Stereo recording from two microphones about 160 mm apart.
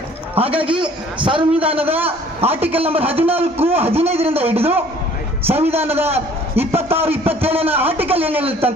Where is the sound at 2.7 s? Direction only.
35° right (ahead or behind).